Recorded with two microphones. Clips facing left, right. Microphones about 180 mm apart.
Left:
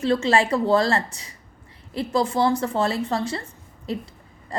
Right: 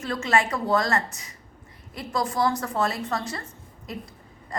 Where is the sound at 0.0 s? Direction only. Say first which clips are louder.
Left 5 dB; 30° left (ahead or behind).